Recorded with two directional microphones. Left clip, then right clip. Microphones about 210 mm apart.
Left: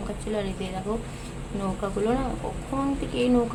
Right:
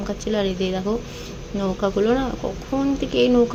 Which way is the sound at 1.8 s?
20° right (ahead or behind).